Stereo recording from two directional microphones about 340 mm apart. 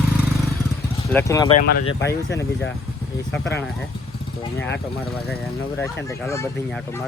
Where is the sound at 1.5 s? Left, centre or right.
Left.